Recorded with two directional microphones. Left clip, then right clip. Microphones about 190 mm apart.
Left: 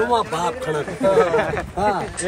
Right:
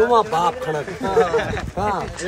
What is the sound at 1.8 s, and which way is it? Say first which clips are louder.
Speech: left 1 dB; 30° right (ahead or behind).